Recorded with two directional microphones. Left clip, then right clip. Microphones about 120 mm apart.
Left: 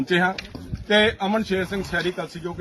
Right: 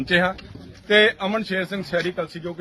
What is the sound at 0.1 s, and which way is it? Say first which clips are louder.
Speech: right 2 dB; 60° right (ahead or behind).